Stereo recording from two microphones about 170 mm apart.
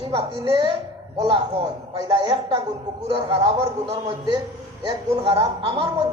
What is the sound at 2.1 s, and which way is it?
Speech, 30° right (ahead or behind).